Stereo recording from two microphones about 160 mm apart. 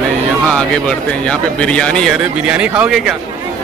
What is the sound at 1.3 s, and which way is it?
Speech, 5° left (ahead or behind).